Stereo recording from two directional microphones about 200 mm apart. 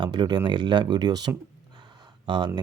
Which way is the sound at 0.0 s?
20° right (ahead or behind).